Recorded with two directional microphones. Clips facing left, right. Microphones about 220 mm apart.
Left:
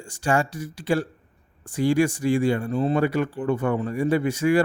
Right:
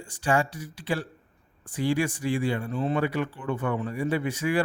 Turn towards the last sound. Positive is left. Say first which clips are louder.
# left 6 dB
turn(degrees=45)  # may be behind; listen again after turning